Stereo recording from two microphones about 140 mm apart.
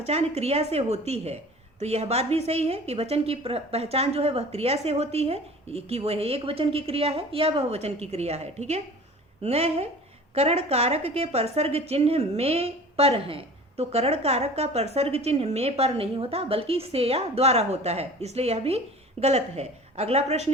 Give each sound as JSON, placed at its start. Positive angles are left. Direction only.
{"t": 0.0, "sound": "a woman's voice", "side_deg": -50}